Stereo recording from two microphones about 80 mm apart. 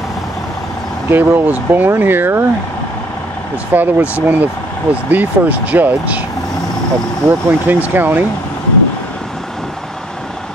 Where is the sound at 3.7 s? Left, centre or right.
Right.